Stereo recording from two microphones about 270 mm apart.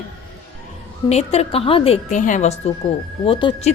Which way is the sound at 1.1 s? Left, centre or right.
Left.